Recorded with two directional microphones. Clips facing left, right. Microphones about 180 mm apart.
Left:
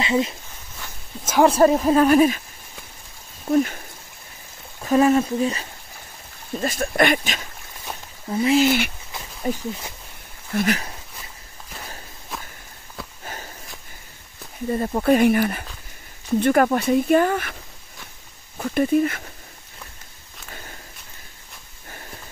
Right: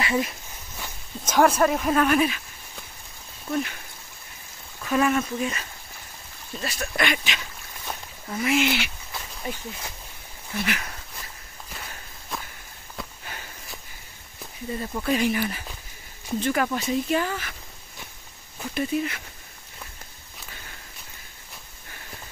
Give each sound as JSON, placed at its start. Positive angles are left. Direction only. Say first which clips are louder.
{"t": 0.0, "sound": "speech", "louder": "left 4 dB", "side_deg": 20}
{"t": 1.4, "sound": "speech", "louder": "left 5 dB", "side_deg": 30}
{"t": 3.4, "sound": "speech", "louder": "left 8 dB", "side_deg": 40}
{"t": 4.8, "sound": "speech", "louder": "left 6 dB", "side_deg": 35}
{"t": 6.5, "sound": "speech", "louder": "left 7 dB", "side_deg": 45}
{"t": 8.3, "sound": "speech", "louder": "left 6 dB", "side_deg": 30}
{"t": 8.6, "sound": "speech", "louder": "left 6 dB", "side_deg": 50}
{"t": 13.2, "sound": "walk", "louder": "left 4 dB", "side_deg": 40}
{"t": 14.7, "sound": "speech", "louder": "left 8 dB", "side_deg": 50}
{"t": 18.6, "sound": "speech", "louder": "left 7 dB", "side_deg": 50}